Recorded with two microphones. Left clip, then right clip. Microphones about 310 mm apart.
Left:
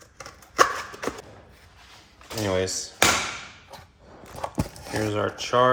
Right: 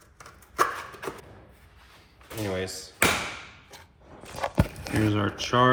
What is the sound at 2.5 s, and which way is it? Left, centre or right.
Speech, left.